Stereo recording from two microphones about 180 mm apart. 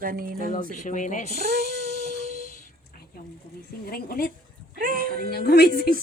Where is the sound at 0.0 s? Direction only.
50° right (ahead or behind).